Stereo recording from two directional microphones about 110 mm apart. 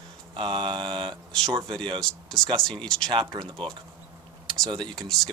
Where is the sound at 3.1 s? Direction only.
45° right (ahead or behind).